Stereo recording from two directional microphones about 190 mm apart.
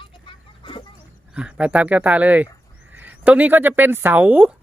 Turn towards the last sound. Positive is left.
turn(degrees=-10)  # may be behind; listen again after turning